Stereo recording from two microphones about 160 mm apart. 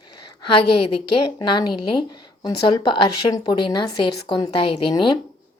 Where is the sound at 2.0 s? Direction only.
25° left (ahead or behind).